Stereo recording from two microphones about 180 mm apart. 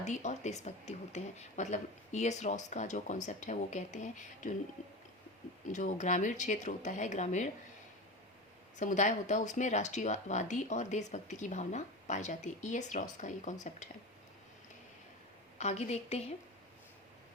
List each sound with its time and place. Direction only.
0.0 s speech: 40° left (ahead or behind)
5.7 s speech: 45° left (ahead or behind)
8.8 s speech: 40° left (ahead or behind)
15.5 s speech: 40° left (ahead or behind)